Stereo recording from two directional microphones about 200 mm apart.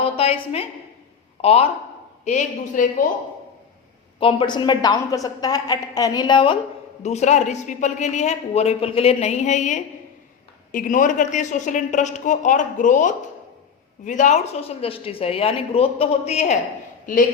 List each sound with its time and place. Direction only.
0.0 s a sound: 30° left (ahead or behind)
1.4 s a woman's voice: 30° left (ahead or behind)
4.2 s a woman's voice: 25° left (ahead or behind)